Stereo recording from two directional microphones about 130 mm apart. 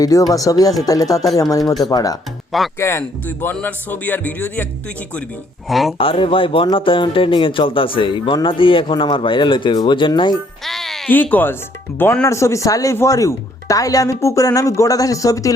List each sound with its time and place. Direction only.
0.0 s speech: 30° left (ahead or behind)
5.6 s speech: centre (ahead or behind)
6.0 s speech: 45° left (ahead or behind)
10.7 s music: centre (ahead or behind)
11.1 s speech: 15° left (ahead or behind)